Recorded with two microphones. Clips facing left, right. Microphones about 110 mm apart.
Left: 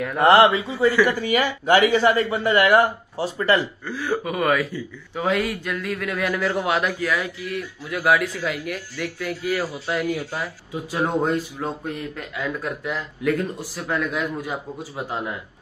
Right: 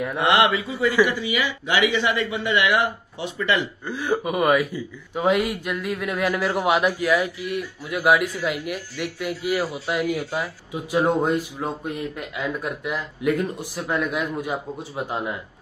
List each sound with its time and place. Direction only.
0.2 s a man's voice: 40° left (ahead or behind)
0.5 s a man's voice: 30° left (ahead or behind)
1.0 s speech: 45° left (ahead or behind)
3.8 s speech: 20° right (ahead or behind)